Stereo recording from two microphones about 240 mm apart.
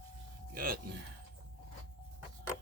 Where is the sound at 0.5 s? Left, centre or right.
Right.